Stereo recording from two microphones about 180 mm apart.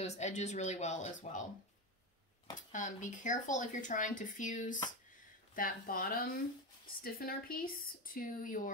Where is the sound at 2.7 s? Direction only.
45° left (ahead or behind).